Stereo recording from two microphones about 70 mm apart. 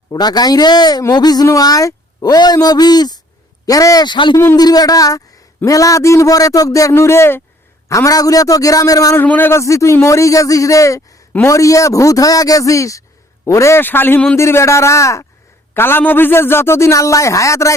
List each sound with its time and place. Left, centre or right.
0.1 s speech: left
1.1 s speech: left
1.5 s speech: left
3.7 s a man's voice: left
4.0 s speech: left
4.5 s a man's voice: left
6.9 s a man's voice: left
7.9 s a man's voice: left
9.2 s speech: left
9.5 s a man's voice: left
13.8 s a man's voice: left
14.3 s a man's voice: left
15.7 s a man's voice: left